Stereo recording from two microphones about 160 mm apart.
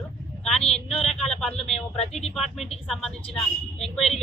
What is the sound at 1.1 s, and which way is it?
Speech, 5° left (ahead or behind).